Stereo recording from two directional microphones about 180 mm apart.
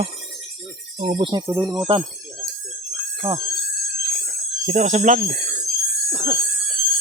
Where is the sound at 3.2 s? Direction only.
30° right (ahead or behind).